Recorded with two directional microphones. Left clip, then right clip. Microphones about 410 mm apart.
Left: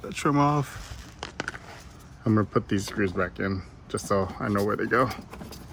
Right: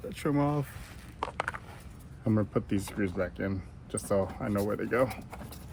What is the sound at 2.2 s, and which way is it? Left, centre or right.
Speech, left.